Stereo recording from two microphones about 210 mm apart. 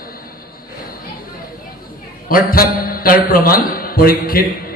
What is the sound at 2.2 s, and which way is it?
A man's voice, 45° left (ahead or behind).